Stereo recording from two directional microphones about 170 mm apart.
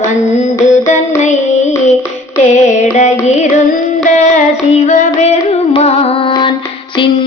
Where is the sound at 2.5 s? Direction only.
45° left (ahead or behind).